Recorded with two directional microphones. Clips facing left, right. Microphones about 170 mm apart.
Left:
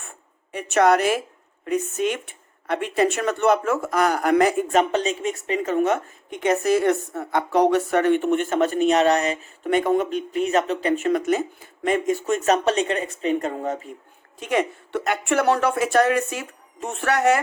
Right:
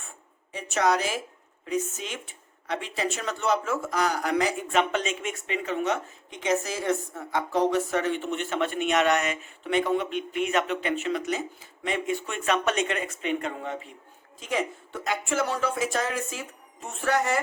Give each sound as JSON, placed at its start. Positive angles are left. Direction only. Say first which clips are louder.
{"t": 0.5, "sound": "a woman's voice", "louder": "left 7 dB", "side_deg": 60}
{"t": 14.3, "sound": "speech", "louder": "left 6 dB", "side_deg": 65}